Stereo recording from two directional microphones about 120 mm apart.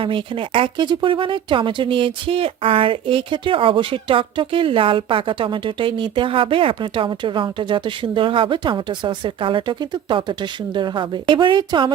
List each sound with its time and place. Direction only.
0.0 s speech: 45° right (ahead or behind)